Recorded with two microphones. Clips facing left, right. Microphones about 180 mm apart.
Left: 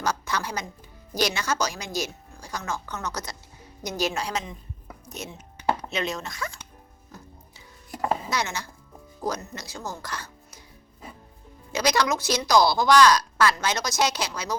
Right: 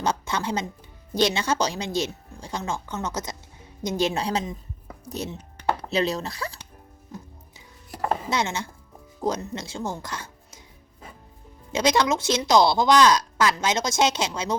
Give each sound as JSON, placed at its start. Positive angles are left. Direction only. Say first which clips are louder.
{"t": 0.0, "sound": "a woman's voice", "louder": "right 2 dB", "side_deg": -25}
{"t": 8.3, "sound": "a woman's voice", "louder": "right 3 dB", "side_deg": -25}
{"t": 11.7, "sound": "a woman's voice", "louder": "right 2 dB", "side_deg": -25}